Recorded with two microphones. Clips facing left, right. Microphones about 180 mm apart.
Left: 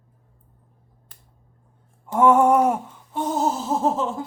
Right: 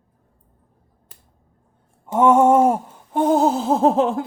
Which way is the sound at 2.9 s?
55° right (ahead or behind).